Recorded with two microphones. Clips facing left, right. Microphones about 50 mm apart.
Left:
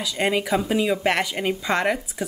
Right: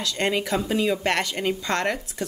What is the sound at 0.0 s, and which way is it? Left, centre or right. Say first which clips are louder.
Speech: left 2 dB; centre.